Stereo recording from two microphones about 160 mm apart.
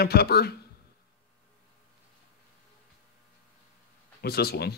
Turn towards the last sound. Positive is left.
turn(degrees=80)